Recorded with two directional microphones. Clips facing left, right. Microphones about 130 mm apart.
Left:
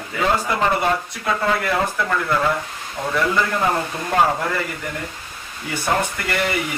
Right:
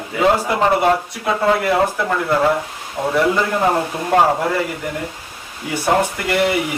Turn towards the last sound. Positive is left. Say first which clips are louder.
# right 5 dB
turn(degrees=-15)  # may be behind; listen again after turning